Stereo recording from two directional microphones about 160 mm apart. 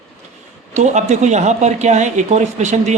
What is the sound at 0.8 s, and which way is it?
Speech, 45° right (ahead or behind).